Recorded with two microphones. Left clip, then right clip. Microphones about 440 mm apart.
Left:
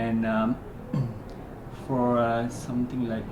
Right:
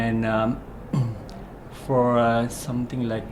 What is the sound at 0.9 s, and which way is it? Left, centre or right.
Music, right.